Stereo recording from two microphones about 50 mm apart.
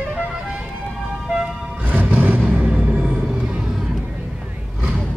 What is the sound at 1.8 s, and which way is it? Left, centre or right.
Vehicle, right.